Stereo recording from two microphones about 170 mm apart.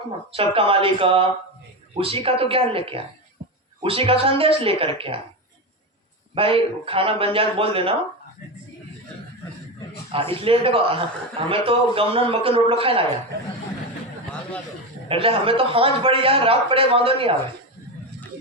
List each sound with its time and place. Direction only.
0.3 s a man's voice: 30° right (ahead or behind)
6.3 s a man's voice: 30° right (ahead or behind)
10.4 s a man's voice: 35° right (ahead or behind)
15.1 s a man's voice: 35° right (ahead or behind)